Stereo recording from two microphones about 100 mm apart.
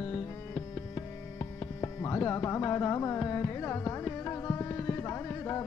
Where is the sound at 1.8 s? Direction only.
30° left (ahead or behind).